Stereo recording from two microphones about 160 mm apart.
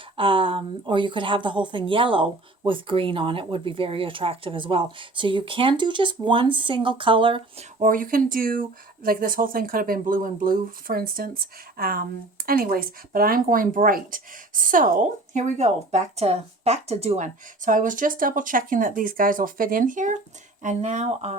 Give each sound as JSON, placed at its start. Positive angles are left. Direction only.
{"t": 0.2, "sound": "speech", "side_deg": -35}
{"t": 7.8, "sound": "speech", "side_deg": -60}
{"t": 15.3, "sound": "speech", "side_deg": -50}